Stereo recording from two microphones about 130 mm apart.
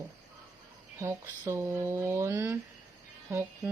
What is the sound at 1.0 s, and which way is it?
Speech, 20° right (ahead or behind).